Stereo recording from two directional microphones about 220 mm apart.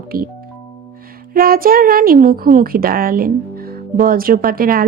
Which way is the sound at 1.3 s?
40° right (ahead or behind).